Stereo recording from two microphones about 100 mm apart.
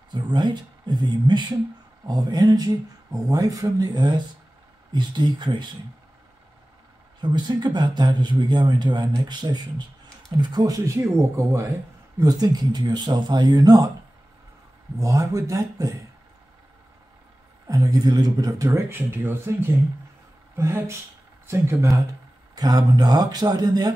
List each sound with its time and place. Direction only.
0.1 s a man's voice: 50° right (ahead or behind)
7.2 s a man's voice: 50° right (ahead or behind)
11.0 s speech: 30° right (ahead or behind)
12.2 s speech: 40° right (ahead or behind)
15.0 s speech: 35° right (ahead or behind)
17.6 s speech: 35° right (ahead or behind)